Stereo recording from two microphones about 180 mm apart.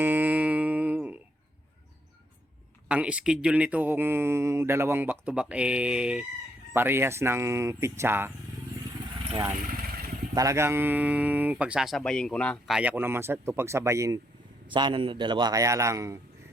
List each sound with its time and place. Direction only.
0.0 s music: 10° right (ahead or behind)
2.9 s speech: 5° right (ahead or behind)
10.3 s speech: 15° right (ahead or behind)
14.7 s a man's voice: 25° right (ahead or behind)